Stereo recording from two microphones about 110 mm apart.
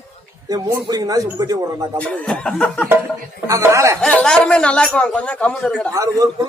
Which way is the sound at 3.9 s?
10° left (ahead or behind).